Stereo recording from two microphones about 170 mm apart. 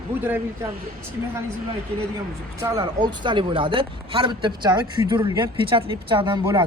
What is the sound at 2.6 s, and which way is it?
Speech, 25° right (ahead or behind).